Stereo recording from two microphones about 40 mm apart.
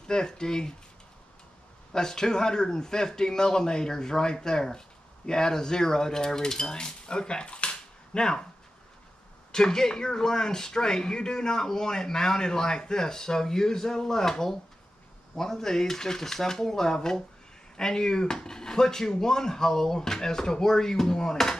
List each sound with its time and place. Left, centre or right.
0.0 s speech: centre
1.9 s speech: centre
9.5 s speech: centre